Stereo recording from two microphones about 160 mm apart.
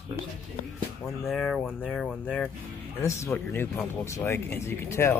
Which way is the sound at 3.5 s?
15° left (ahead or behind).